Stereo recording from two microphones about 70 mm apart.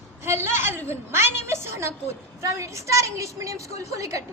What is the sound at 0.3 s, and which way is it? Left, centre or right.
A woman's voice, right.